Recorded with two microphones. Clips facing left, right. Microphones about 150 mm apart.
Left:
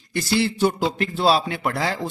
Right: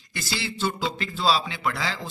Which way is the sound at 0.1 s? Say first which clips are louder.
Left 11 dB; 55° left (ahead or behind).